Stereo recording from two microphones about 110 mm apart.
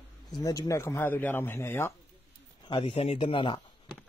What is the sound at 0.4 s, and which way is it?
A man's voice, 30° left (ahead or behind).